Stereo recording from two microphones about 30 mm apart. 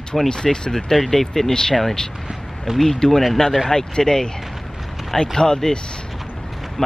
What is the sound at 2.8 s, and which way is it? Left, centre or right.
Speech, centre.